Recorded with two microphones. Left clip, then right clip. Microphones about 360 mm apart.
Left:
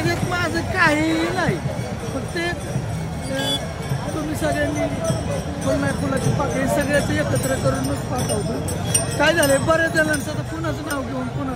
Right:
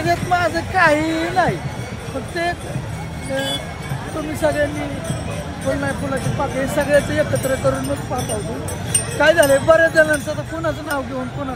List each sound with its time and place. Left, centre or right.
0.0 s speech: centre
4.4 s speech: centre
6.6 s speech: centre
9.2 s speech: centre